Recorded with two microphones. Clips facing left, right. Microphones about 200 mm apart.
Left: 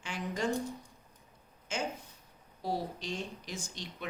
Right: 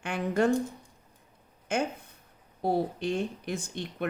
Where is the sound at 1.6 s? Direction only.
55° right (ahead or behind).